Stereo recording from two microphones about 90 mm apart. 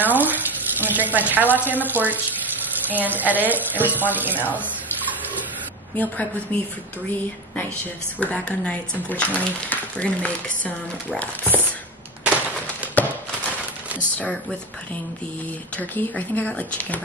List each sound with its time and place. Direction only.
0.0 s water tap: 20° right (ahead or behind)
0.7 s a sound: 20° right (ahead or behind)
1.1 s speech: 20° right (ahead or behind)
6.5 s speech: 15° left (ahead or behind)
8.2 s speech: 15° left (ahead or behind)
13.0 s a sound: 20° left (ahead or behind)
13.9 s speech: 15° left (ahead or behind)
15.8 s speech: 20° left (ahead or behind)